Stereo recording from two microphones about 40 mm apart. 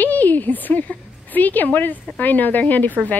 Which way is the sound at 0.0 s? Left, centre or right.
Left.